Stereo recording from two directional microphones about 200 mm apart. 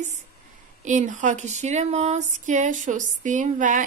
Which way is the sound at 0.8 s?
40° right (ahead or behind).